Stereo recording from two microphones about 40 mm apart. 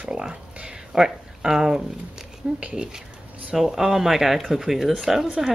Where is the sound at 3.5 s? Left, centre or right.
Centre.